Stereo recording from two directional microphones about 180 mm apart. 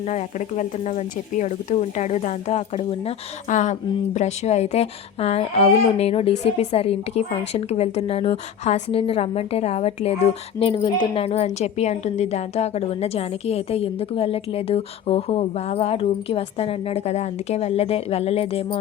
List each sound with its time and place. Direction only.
0.0 s a woman's voice: 40° left (ahead or behind)